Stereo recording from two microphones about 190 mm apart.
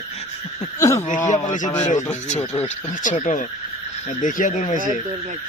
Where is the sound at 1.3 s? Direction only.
40° left (ahead or behind).